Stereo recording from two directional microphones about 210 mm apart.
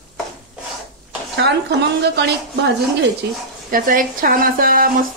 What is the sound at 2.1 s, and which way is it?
Speech, 55° right (ahead or behind).